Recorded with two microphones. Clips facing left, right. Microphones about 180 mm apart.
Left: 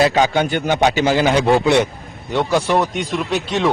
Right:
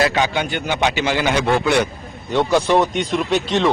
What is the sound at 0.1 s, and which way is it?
A man's voice, 40° left (ahead or behind).